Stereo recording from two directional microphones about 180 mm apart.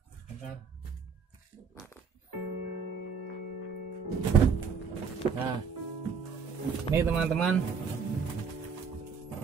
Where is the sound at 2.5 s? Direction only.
65° right (ahead or behind).